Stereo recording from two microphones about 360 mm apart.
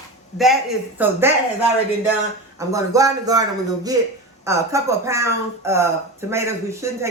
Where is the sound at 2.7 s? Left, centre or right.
Centre.